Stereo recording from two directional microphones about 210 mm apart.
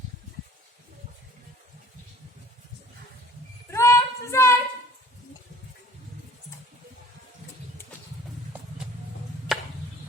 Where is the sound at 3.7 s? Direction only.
15° left (ahead or behind).